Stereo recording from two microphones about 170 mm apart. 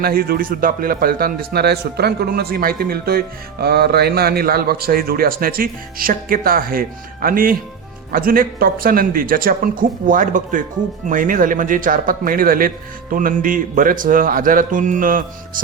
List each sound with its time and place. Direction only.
0.0 s a man's voice: 60° right (ahead or behind)